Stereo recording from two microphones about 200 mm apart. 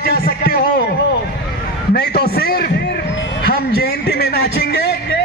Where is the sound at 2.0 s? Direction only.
50° left (ahead or behind).